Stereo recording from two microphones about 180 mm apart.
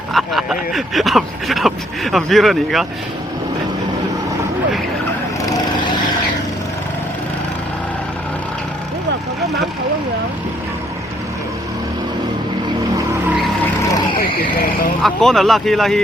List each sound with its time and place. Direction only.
0.1 s speech: centre (ahead or behind)
14.2 s speech: 55° left (ahead or behind)
15.0 s speech: centre (ahead or behind)